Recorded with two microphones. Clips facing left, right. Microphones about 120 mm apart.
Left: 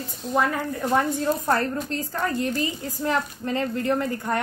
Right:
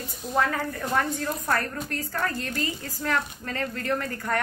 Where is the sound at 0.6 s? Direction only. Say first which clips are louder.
Left 4 dB; 20° left (ahead or behind).